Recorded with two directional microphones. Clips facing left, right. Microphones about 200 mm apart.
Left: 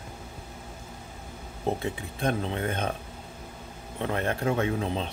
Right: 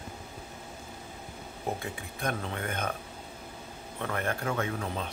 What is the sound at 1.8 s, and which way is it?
Speech, 25° left (ahead or behind).